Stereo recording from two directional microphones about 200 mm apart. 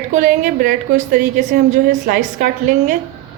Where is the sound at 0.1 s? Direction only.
45° right (ahead or behind).